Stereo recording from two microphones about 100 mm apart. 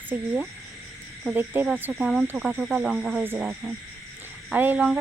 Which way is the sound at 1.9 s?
5° right (ahead or behind).